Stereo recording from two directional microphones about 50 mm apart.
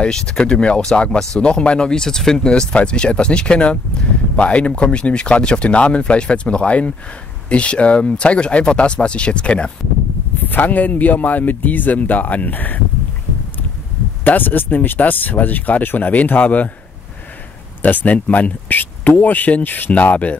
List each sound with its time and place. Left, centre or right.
0.0 s speech: centre
10.5 s speech: left
14.2 s speech: left
17.8 s speech: left